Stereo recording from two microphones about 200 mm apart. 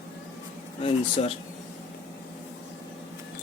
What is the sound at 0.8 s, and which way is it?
Speech, 30° left (ahead or behind).